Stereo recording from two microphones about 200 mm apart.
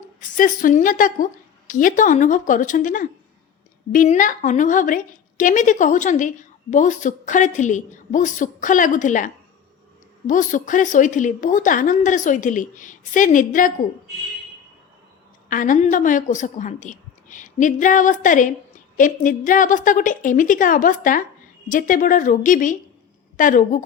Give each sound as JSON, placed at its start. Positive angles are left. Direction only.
{"t": 0.2, "sound": "a woman's voice", "side_deg": 40}
{"t": 15.4, "sound": "a woman's voice", "side_deg": 40}